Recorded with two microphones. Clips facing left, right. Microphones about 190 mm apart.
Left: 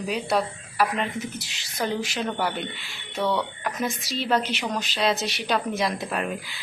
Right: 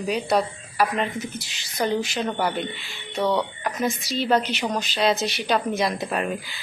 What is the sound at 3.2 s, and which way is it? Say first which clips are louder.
Speech: right 2 dB; 20° right (ahead or behind).